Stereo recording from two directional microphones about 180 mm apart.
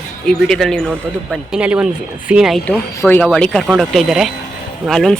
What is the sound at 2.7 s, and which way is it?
Speech, 10° left (ahead or behind).